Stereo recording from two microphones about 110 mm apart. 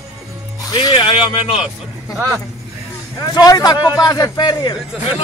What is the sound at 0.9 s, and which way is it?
Speech, 50° left (ahead or behind).